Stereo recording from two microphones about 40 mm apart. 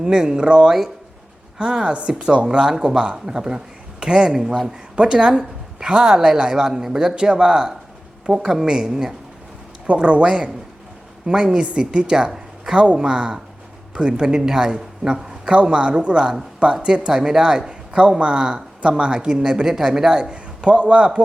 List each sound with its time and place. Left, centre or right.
0.0 s speech: centre
4.3 s speech: centre
9.8 s speech: right
11.3 s speech: centre
11.5 s a woman's voice: right